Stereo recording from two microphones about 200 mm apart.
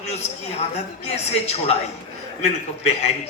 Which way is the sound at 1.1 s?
35° left (ahead or behind).